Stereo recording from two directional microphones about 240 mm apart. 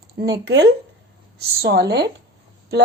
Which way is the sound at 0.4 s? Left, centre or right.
Right.